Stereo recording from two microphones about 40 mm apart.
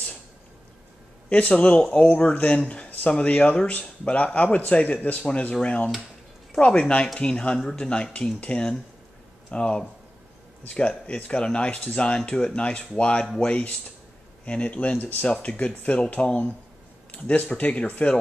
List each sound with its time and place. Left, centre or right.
1.3 s speech: left
13.5 s speech: left